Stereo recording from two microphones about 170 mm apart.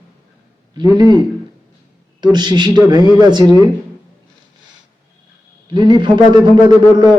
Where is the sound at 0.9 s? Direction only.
25° right (ahead or behind).